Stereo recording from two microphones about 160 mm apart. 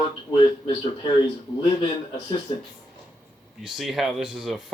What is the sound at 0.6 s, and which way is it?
Speech, 30° left (ahead or behind).